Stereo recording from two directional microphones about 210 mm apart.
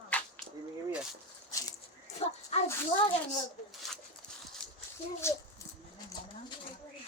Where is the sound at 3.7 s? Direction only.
Centre (ahead or behind).